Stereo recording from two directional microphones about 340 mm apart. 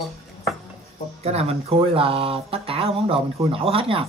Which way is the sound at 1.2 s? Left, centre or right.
Centre.